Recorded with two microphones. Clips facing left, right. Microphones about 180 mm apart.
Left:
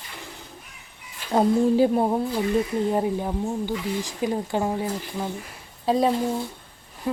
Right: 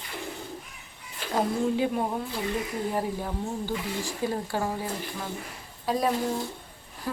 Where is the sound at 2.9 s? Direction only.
20° left (ahead or behind).